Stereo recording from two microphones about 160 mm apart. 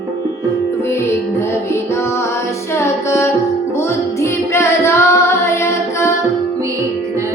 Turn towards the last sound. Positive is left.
turn(degrees=15)  # may be behind; listen again after turning